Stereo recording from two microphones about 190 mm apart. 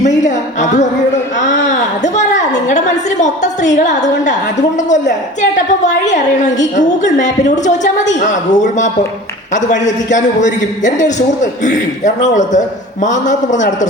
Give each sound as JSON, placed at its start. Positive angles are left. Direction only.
{"t": 0.2, "sound": "music", "side_deg": 40}
{"t": 1.6, "sound": "a sound", "side_deg": 40}
{"t": 2.6, "sound": "a man's voice", "side_deg": 40}
{"t": 5.4, "sound": "a man's voice", "side_deg": 40}